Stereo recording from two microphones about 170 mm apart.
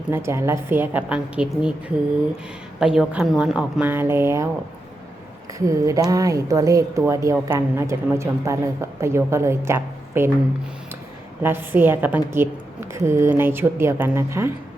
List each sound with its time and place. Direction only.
0.1 s a woman's voice: 15° right (ahead or behind)
2.8 s a woman's voice: 5° right (ahead or behind)
5.5 s a woman's voice: 20° right (ahead or behind)
11.4 s a woman's voice: 10° right (ahead or behind)